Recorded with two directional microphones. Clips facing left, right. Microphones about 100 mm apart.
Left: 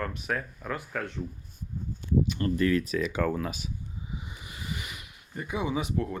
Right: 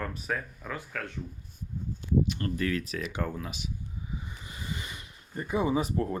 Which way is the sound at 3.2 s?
85° left.